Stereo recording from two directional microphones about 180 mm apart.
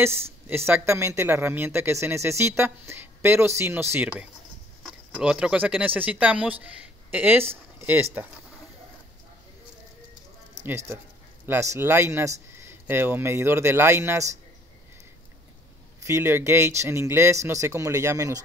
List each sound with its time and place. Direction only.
0.0 s speech: 15° right (ahead or behind)
11.4 s speech: 15° right (ahead or behind)
16.0 s speech: 15° right (ahead or behind)